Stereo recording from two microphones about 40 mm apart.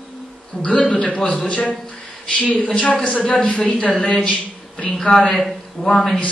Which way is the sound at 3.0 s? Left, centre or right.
Left.